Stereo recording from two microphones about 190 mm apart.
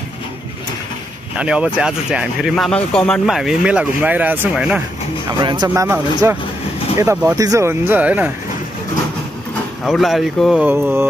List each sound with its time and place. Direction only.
1.3 s speech: 5° right (ahead or behind)
5.4 s speech: 25° right (ahead or behind)
5.7 s speech: 10° right (ahead or behind)
9.8 s speech: centre (ahead or behind)